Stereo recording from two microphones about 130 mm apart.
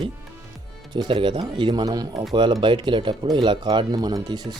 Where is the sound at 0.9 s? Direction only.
35° right (ahead or behind).